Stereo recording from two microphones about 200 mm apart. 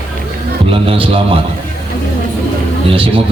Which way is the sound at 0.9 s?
30° right (ahead or behind).